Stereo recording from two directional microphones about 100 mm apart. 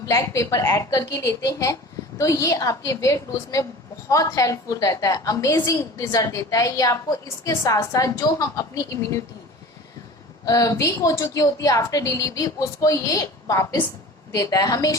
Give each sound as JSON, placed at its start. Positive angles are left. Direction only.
{"t": 0.1, "sound": "a woman's voice", "side_deg": 35}
{"t": 10.4, "sound": "a woman's voice", "side_deg": 35}